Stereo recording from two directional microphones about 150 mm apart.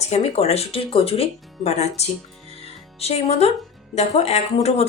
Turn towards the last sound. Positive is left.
turn(degrees=45)  # may be behind; listen again after turning